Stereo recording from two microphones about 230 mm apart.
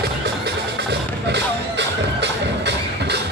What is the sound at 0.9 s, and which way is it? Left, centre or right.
Music, right.